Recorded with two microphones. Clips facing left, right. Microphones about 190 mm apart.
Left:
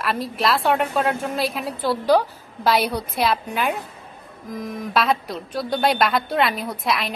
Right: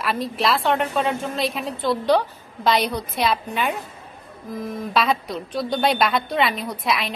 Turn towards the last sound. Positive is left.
turn(degrees=0)  # may be behind; listen again after turning